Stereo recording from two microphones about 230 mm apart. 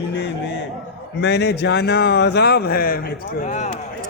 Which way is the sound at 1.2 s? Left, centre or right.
Left.